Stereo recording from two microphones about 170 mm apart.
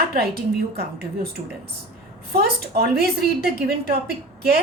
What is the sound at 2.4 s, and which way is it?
A woman's voice, 70° right (ahead or behind).